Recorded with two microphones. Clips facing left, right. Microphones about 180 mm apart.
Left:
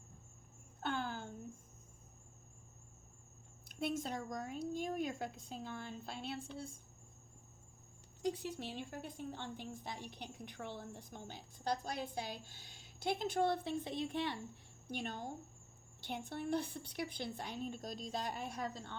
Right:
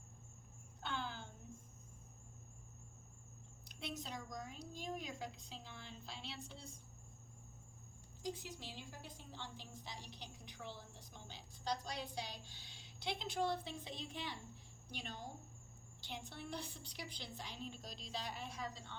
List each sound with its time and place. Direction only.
0.8 s a sound: 50° left (ahead or behind)
3.7 s a woman's voice: 50° left (ahead or behind)
8.2 s a woman's voice: 65° left (ahead or behind)